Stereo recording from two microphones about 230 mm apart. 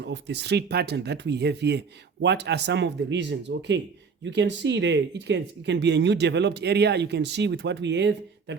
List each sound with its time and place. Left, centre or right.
0.0 s speech: right